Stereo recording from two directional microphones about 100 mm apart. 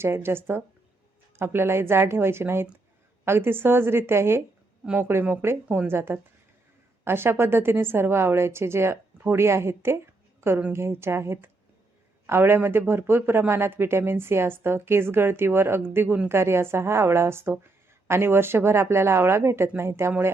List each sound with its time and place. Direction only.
0.0 s speech: 25° right (ahead or behind)